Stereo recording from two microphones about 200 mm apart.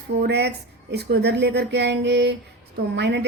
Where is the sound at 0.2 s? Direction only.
55° right (ahead or behind).